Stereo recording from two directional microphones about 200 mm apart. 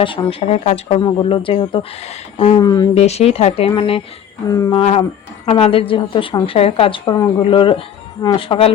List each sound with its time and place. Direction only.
0.0 s a woman's voice: 25° left (ahead or behind)
2.9 s a woman's voice: 30° left (ahead or behind)
4.4 s a sound: 15° left (ahead or behind)
4.8 s a woman's voice: 30° left (ahead or behind)